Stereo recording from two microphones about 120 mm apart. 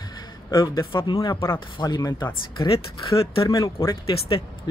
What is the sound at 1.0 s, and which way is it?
Speech, 40° left (ahead or behind).